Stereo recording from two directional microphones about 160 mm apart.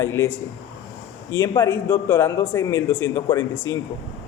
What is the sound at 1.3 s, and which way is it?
A man's voice, 15° left (ahead or behind).